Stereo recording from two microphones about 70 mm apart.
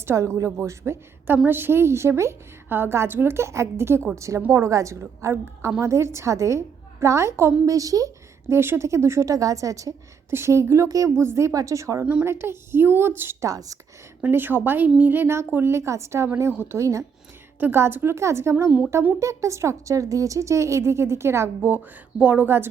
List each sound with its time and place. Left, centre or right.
0.0 s a woman's voice: right
1.5 s a woman's voice: right
7.6 s a woman's voice: right
8.4 s a woman's voice: right
10.2 s a woman's voice: right
11.2 s a woman's voice: right
12.2 s a woman's voice: right
13.4 s a woman's voice: right
14.3 s a woman's voice: right
16.5 s a woman's voice: right
16.7 s a woman's voice: right
17.6 s a woman's voice: right
22.2 s a woman's voice: right